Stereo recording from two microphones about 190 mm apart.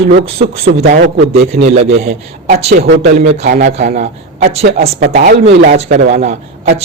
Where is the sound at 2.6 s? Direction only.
55° right (ahead or behind).